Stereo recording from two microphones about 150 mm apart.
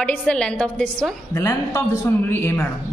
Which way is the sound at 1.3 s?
20° left (ahead or behind).